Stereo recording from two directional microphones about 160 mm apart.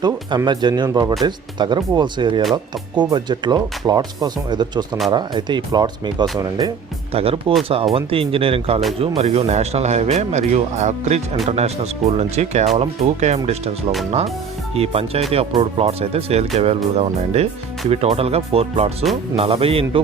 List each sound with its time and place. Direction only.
0.0 s speech: 25° right (ahead or behind)
7.1 s speech: 35° right (ahead or behind)
14.8 s speech: 40° right (ahead or behind)